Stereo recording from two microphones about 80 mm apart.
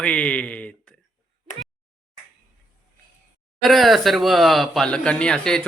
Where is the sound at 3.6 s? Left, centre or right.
Centre.